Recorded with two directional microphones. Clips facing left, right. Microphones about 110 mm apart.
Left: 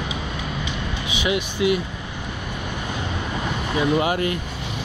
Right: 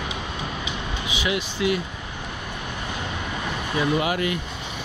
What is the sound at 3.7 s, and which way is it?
Speech, 30° left (ahead or behind).